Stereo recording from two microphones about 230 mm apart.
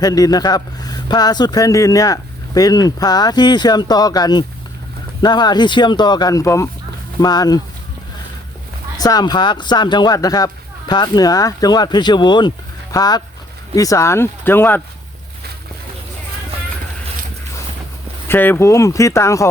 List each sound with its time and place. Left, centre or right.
0.0 s speech: centre
9.0 s speech: centre
18.3 s speech: centre